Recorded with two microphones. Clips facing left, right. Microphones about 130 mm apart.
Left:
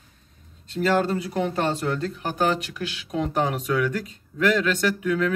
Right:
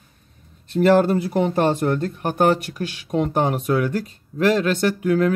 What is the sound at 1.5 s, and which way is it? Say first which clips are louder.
Speech: right 6 dB; 50° right (ahead or behind).